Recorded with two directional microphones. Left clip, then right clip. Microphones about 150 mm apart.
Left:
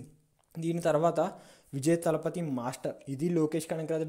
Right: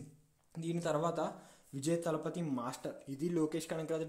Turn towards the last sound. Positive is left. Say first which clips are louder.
# left 6 dB
turn(degrees=35)  # may be behind; listen again after turning